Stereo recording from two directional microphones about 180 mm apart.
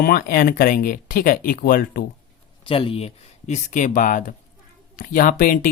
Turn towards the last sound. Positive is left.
turn(degrees=50)  # may be behind; listen again after turning